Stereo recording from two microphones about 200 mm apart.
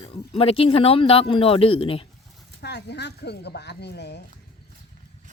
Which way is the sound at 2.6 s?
55° left (ahead or behind).